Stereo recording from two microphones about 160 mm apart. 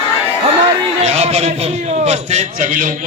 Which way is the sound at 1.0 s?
40° right (ahead or behind).